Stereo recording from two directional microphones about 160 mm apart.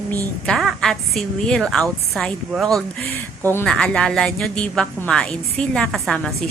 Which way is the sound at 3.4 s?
15° left (ahead or behind).